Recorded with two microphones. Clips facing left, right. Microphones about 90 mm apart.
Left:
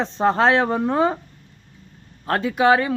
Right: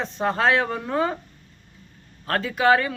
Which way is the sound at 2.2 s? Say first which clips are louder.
Left 2 dB; 20° left (ahead or behind).